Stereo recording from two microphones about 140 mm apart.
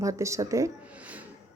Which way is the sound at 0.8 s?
10° right (ahead or behind).